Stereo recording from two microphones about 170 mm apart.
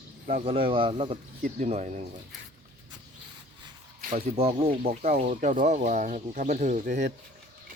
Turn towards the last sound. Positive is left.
turn(degrees=-45)  # may be behind; listen again after turning